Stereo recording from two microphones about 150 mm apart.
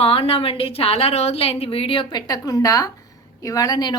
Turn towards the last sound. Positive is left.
turn(degrees=25)  # may be behind; listen again after turning